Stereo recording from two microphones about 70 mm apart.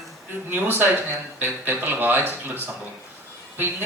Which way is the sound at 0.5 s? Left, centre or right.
Right.